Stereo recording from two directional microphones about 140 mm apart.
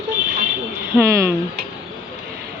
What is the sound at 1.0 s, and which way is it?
Speech, 20° right (ahead or behind).